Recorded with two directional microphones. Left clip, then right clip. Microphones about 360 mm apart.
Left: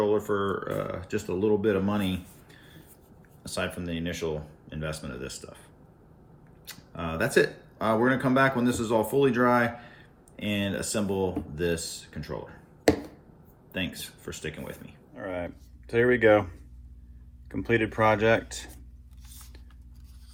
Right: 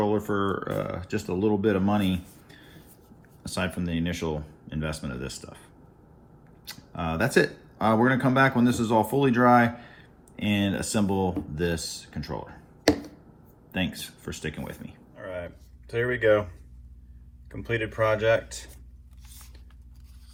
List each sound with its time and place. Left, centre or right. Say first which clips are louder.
0.0 s speech: even; centre
12.9 s a sound: even; centre
13.7 s speech: right 2 dB; centre
15.1 s speech: left 2 dB; centre